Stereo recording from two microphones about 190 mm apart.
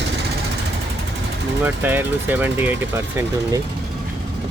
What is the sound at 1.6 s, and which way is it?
Speech, 10° right (ahead or behind).